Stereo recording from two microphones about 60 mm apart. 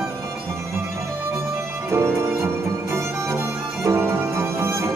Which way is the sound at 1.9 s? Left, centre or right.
Right.